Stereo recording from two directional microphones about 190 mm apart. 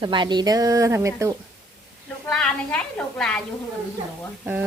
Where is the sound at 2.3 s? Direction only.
5° left (ahead or behind).